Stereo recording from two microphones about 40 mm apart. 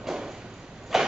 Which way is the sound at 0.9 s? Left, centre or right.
Centre.